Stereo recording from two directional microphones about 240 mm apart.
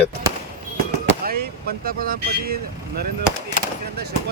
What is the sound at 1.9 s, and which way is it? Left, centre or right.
Speech, right.